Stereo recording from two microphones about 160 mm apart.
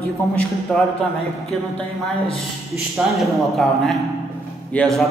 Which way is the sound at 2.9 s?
Centre (ahead or behind).